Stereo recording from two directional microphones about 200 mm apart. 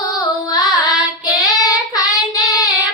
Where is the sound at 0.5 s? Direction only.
20° left (ahead or behind).